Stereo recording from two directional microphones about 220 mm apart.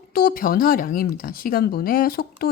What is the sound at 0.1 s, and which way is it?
A woman's voice, 40° left (ahead or behind).